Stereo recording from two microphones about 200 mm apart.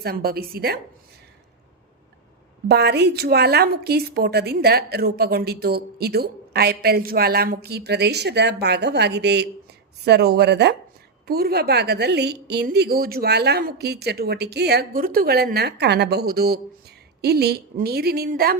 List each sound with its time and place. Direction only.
0.0 s a woman's voice: 50° right (ahead or behind)
2.6 s a woman's voice: 55° right (ahead or behind)